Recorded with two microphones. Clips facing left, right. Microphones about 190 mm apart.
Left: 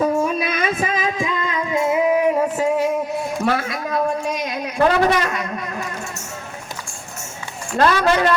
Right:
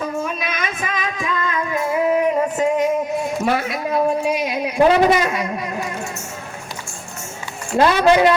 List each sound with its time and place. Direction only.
0.4 s music: 35° left (ahead or behind); by 2.0 s 20° left (ahead or behind)
2.1 s a sound: 5° left (ahead or behind)
7.8 s a woman's voice: 10° right (ahead or behind)